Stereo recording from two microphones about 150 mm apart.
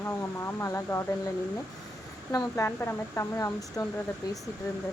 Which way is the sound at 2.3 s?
15° left (ahead or behind).